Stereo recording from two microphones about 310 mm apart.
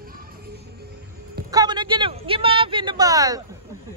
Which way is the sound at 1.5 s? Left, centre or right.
Centre.